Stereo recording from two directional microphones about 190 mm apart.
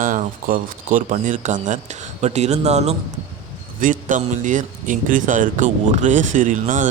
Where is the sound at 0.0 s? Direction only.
45° right (ahead or behind).